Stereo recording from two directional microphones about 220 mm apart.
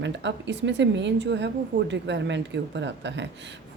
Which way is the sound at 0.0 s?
55° right (ahead or behind).